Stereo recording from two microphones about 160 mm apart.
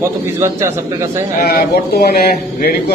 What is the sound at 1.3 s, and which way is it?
Speech, 75° left (ahead or behind).